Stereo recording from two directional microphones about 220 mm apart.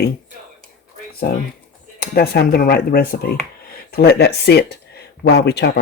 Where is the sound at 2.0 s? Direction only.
45° left (ahead or behind).